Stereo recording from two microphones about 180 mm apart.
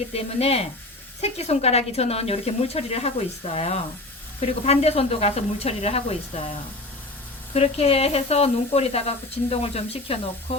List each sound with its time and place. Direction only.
0.1 s speech: 35° left (ahead or behind)
7.5 s speech: 35° left (ahead or behind)